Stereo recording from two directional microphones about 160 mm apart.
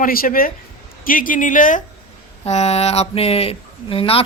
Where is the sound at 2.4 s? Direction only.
45° left (ahead or behind).